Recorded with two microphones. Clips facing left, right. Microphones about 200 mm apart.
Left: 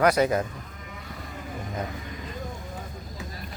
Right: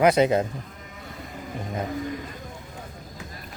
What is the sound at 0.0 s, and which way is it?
Speech, 25° right (ahead or behind).